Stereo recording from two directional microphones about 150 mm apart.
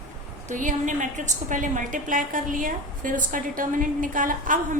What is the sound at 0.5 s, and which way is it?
A woman's voice, 60° right (ahead or behind).